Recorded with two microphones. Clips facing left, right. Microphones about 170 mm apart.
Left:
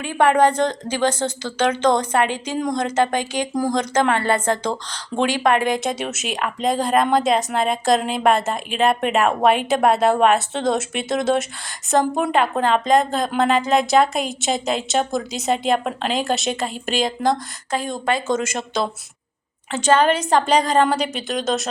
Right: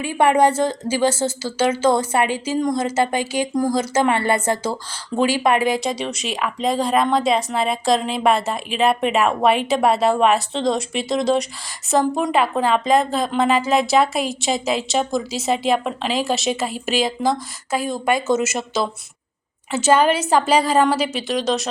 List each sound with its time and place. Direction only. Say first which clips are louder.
0.0 s a woman's voice: even; 10° right (ahead or behind)